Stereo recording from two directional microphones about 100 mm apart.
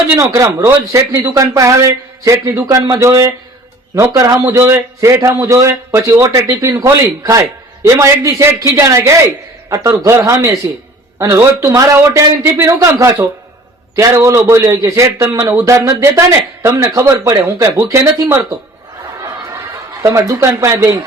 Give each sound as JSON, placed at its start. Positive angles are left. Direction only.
{"t": 0.2, "sound": "a man's voice", "side_deg": -35}
{"t": 20.0, "sound": "a man's voice", "side_deg": -30}